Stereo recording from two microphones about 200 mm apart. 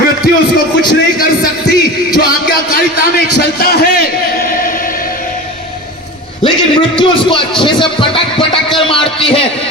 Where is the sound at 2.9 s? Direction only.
55° left (ahead or behind).